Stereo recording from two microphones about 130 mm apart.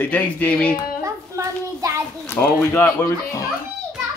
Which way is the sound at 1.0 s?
25° right (ahead or behind).